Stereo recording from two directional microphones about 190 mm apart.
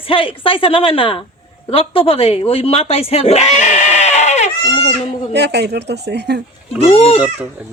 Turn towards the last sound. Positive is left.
turn(degrees=30)  # may be behind; listen again after turning